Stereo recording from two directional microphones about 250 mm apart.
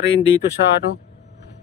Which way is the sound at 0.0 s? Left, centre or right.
Left.